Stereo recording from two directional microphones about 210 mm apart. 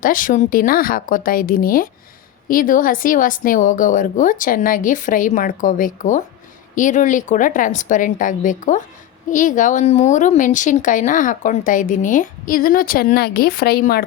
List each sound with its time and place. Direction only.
0.0 s speech: 40° left (ahead or behind)